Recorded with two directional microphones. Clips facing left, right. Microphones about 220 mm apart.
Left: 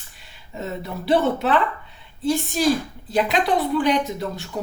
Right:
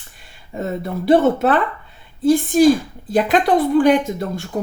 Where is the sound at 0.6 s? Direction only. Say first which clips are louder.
Right 6 dB; 50° right (ahead or behind).